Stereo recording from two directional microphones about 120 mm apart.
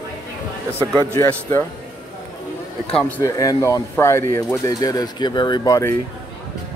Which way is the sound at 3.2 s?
30° left (ahead or behind).